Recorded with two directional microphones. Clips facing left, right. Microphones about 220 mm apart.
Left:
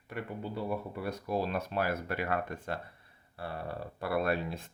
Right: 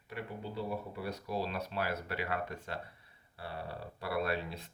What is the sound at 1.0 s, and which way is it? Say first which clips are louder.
Speech: left 5 dB; 50° left (ahead or behind).